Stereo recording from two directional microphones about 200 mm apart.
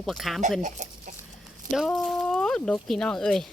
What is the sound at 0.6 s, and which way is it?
Speech, 35° right (ahead or behind).